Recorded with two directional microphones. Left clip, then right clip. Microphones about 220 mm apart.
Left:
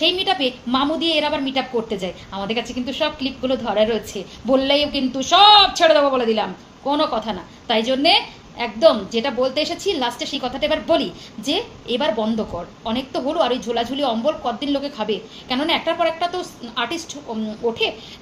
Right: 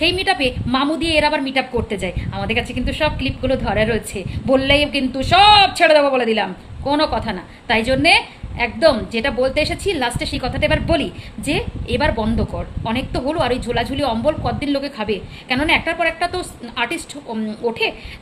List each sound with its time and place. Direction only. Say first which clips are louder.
0.0 s a woman's voice: right 2 dB; 15° right (ahead or behind)